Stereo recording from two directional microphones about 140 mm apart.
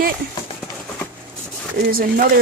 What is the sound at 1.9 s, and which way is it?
Speech, 90° right.